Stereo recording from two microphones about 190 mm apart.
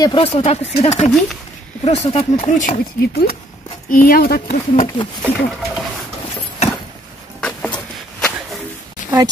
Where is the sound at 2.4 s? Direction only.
45° left (ahead or behind).